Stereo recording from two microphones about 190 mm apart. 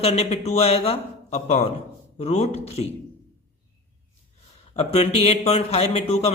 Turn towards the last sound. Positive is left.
turn(degrees=35)  # may be behind; listen again after turning